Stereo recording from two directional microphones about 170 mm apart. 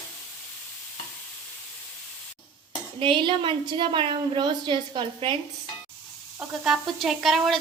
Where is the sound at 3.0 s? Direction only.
30° right (ahead or behind).